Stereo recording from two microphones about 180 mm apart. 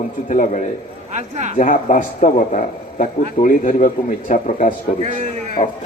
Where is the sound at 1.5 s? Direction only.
45° left (ahead or behind).